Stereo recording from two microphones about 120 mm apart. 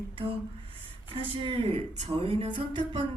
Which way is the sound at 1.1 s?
45° right (ahead or behind).